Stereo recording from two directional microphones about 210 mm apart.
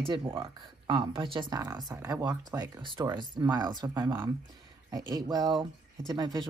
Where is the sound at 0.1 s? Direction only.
25° right (ahead or behind).